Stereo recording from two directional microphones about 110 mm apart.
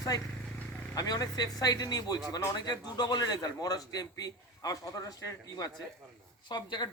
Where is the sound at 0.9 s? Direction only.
35° left (ahead or behind).